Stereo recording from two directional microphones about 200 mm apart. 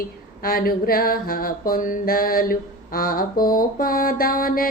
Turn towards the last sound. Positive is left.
turn(degrees=45)  # may be behind; listen again after turning